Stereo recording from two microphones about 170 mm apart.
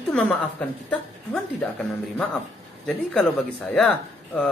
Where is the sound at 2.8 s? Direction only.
5° left (ahead or behind).